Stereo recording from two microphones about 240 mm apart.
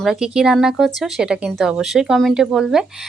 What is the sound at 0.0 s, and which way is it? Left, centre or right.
Speech, centre.